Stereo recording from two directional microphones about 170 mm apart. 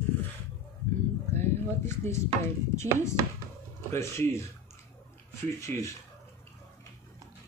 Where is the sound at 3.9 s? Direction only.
15° left (ahead or behind).